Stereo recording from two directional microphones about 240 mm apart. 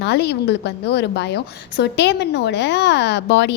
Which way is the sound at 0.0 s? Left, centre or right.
Left.